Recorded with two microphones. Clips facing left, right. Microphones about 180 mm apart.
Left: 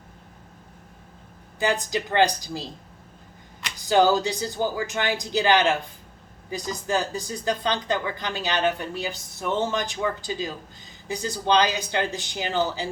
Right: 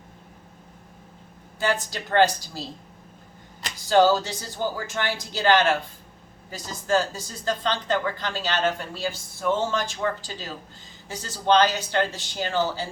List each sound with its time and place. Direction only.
1.5 s a woman's voice: 15° left (ahead or behind)
3.8 s a woman's voice: 15° left (ahead or behind)